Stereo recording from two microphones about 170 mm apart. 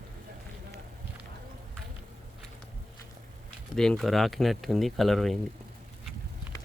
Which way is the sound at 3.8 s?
Centre (ahead or behind).